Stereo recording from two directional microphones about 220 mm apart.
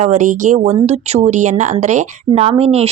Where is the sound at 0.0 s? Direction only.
35° right (ahead or behind).